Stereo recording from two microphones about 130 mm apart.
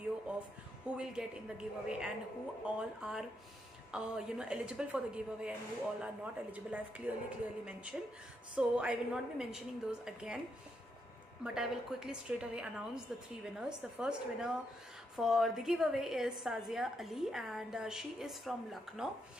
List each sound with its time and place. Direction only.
0.8 s a woman's voice: 5° right (ahead or behind)
11.4 s a woman's voice: 5° right (ahead or behind)